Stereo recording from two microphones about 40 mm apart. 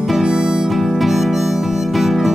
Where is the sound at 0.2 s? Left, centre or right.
Centre.